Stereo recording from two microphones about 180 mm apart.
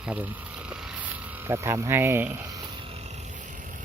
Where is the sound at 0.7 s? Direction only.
10° right (ahead or behind).